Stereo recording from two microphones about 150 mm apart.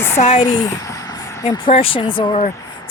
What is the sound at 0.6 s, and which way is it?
Vehicle, 20° left (ahead or behind).